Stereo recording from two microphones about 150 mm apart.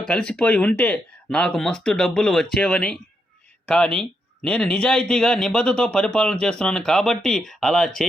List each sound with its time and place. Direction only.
0.0 s speech: 5° left (ahead or behind)